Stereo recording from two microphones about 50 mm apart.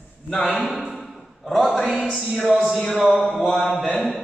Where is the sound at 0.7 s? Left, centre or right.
Centre.